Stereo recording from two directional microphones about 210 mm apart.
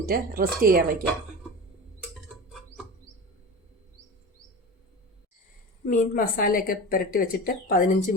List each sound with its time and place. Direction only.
0.0 s speech: 45° right (ahead or behind)
5.8 s a woman's voice: 40° left (ahead or behind)